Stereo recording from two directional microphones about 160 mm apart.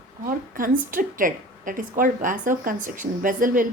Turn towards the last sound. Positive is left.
turn(degrees=-60)  # may be behind; listen again after turning